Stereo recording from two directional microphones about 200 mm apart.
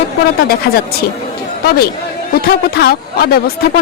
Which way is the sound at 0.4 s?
50° left (ahead or behind).